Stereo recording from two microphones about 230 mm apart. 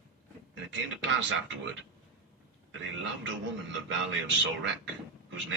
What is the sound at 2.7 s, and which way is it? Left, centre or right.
A man's voice, right.